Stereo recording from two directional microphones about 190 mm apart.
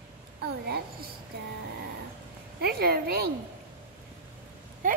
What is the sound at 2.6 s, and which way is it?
Speech, 55° right (ahead or behind).